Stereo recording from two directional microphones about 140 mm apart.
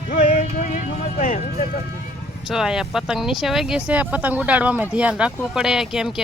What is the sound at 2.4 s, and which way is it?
Speech, 5° right (ahead or behind).